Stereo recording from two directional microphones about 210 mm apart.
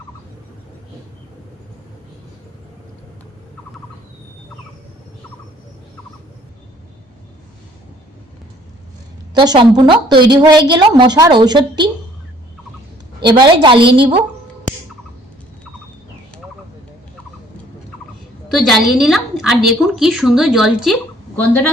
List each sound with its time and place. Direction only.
9.3 s a woman's voice: 20° right (ahead or behind)
13.2 s a woman's voice: 20° right (ahead or behind)
18.6 s a woman's voice: centre (ahead or behind)